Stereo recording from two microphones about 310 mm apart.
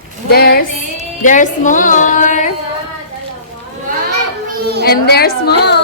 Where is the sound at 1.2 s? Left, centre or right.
Left.